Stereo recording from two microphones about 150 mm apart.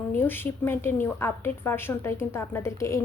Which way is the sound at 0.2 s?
15° left (ahead or behind).